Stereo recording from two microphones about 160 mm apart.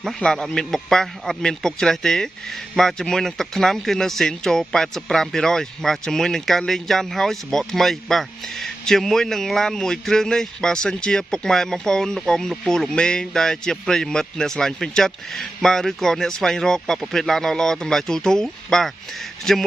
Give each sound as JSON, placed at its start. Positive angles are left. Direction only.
{"t": 0.0, "sound": "a man's voice", "side_deg": 5}